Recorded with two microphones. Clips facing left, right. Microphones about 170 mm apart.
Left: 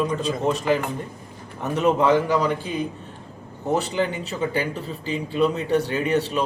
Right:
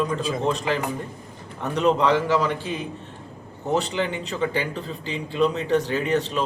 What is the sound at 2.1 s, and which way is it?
Speech, 15° left (ahead or behind).